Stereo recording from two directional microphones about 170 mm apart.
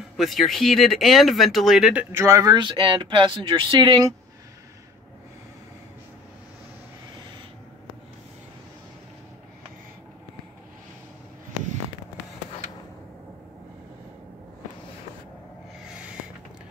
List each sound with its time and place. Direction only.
0.2 s speech: centre (ahead or behind)
2.1 s speech: 20° right (ahead or behind)